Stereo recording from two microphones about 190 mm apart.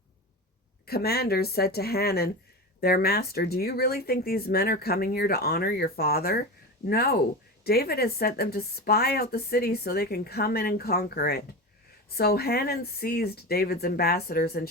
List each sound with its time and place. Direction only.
0.9 s speech: 55° left (ahead or behind)